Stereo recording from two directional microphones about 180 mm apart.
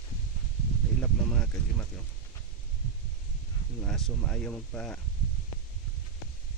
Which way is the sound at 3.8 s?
5° left (ahead or behind).